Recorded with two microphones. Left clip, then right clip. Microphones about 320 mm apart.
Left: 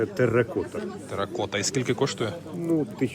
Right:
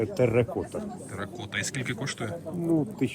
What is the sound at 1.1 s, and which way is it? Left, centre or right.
Speech, centre.